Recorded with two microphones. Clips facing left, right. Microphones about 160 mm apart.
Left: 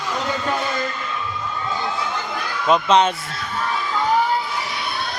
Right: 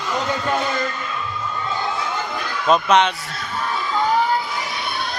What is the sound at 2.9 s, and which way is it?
Speech, 25° left (ahead or behind).